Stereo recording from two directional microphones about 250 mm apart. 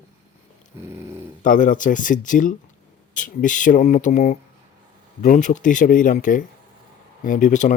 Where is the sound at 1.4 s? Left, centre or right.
Left.